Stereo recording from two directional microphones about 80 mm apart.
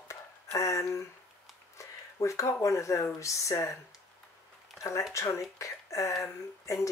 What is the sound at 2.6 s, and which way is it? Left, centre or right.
Speech, left.